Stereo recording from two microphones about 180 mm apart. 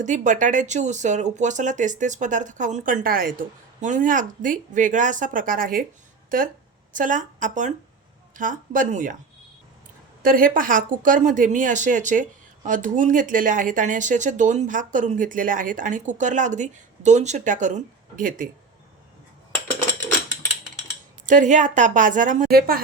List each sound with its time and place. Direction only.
0.0 s speech: 45° right (ahead or behind)
6.9 s speech: 45° right (ahead or behind)
10.2 s speech: 50° right (ahead or behind)
21.2 s speech: 45° right (ahead or behind)